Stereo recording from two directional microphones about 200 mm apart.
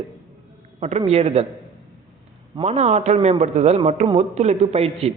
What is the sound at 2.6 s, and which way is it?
A man's voice, 35° right (ahead or behind).